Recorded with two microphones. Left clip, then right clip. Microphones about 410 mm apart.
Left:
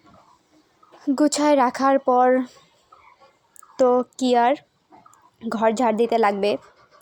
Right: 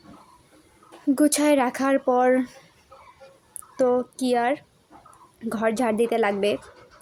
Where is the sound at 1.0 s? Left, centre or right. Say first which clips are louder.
Left 1 dB; right.